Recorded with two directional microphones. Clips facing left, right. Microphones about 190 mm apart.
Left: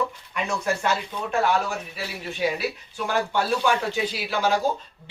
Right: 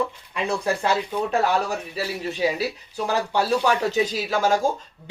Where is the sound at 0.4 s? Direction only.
35° right (ahead or behind).